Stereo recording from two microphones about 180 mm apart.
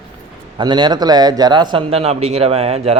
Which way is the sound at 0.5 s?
25° right (ahead or behind).